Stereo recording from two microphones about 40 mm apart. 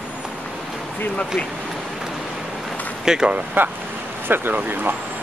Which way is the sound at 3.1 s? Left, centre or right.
Centre.